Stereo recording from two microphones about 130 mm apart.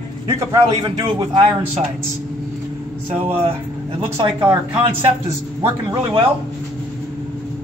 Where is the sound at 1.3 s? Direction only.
45° right (ahead or behind).